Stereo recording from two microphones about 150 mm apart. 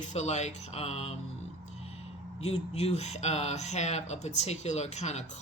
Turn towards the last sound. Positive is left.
turn(degrees=50)  # may be behind; listen again after turning